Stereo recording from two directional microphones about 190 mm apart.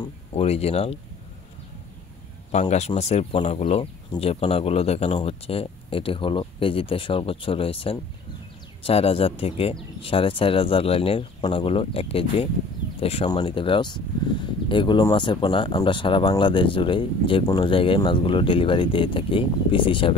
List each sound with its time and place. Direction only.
0.3 s speech: 35° left (ahead or behind)
2.7 s speech: 35° left (ahead or behind)